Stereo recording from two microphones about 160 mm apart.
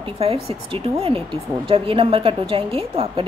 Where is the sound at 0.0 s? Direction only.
35° right (ahead or behind).